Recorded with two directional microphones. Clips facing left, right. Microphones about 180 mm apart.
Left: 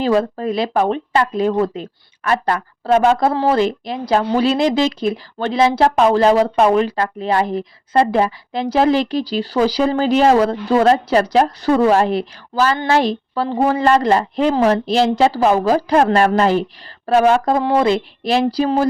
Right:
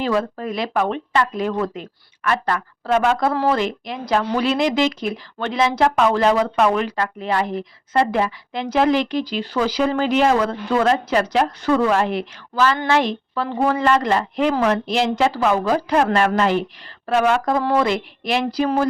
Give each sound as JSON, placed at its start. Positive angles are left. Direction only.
{"t": 0.0, "sound": "speech", "side_deg": 30}